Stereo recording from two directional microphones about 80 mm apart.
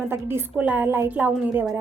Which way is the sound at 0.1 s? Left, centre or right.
Right.